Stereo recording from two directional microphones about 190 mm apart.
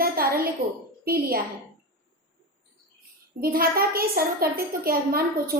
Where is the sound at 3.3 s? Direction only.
50° right (ahead or behind).